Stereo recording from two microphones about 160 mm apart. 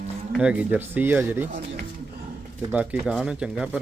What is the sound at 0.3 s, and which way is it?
Speech, 5° right (ahead or behind).